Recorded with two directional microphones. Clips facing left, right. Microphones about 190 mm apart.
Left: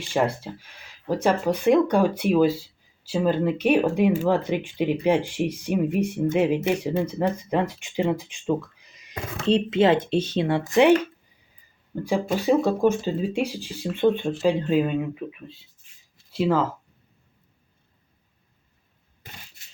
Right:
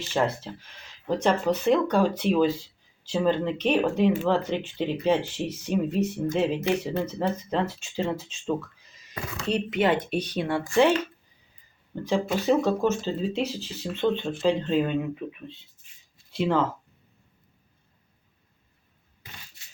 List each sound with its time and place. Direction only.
0.0 s speech: 10° left (ahead or behind)
11.9 s speech: 10° left (ahead or behind)